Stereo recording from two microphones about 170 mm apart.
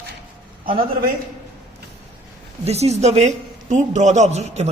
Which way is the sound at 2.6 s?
40° right (ahead or behind).